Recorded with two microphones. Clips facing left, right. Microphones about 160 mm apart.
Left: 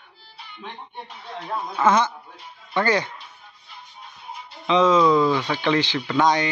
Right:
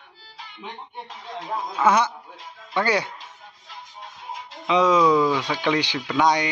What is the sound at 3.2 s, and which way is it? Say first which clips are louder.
Music: right 2 dB; 90° right.